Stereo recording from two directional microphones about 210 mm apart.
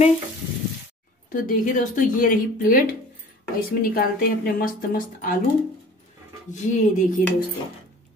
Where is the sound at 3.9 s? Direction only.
45° left (ahead or behind).